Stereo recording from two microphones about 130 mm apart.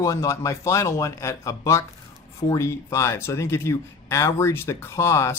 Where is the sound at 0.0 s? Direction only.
25° left (ahead or behind).